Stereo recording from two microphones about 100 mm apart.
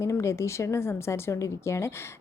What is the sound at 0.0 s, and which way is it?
A woman's voice, 30° left (ahead or behind).